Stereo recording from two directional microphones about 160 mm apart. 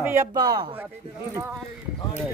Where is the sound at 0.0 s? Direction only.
15° right (ahead or behind).